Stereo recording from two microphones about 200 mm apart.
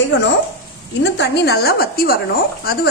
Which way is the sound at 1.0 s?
60° left (ahead or behind).